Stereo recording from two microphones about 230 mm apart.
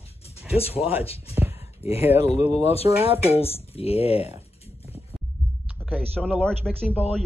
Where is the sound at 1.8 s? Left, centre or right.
Left.